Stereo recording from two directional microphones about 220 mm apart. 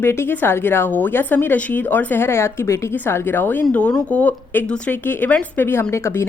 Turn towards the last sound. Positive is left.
turn(degrees=10)  # may be behind; listen again after turning